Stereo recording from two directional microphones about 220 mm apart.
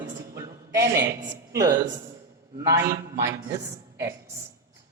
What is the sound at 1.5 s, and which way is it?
A man's voice, 15° right (ahead or behind).